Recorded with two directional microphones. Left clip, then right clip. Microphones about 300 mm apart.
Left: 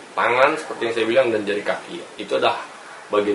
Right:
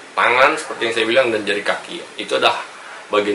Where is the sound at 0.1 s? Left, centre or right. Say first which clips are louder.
Right 3 dB; centre.